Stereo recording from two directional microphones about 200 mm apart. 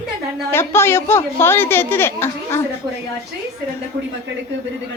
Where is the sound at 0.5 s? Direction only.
10° left (ahead or behind).